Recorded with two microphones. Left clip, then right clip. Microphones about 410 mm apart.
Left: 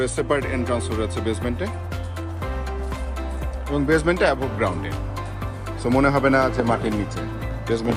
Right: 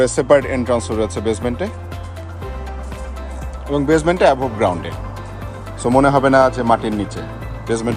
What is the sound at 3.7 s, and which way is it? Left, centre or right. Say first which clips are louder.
Speech: right 5 dB; centre.